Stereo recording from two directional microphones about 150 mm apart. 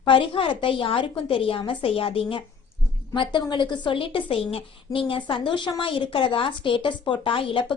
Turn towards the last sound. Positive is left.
turn(degrees=35)  # may be behind; listen again after turning